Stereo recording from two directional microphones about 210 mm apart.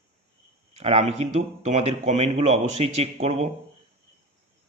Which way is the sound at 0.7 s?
30° right (ahead or behind).